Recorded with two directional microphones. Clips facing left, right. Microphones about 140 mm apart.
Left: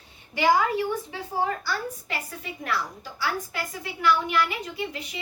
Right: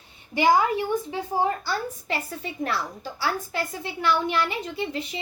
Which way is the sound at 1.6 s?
30° right (ahead or behind).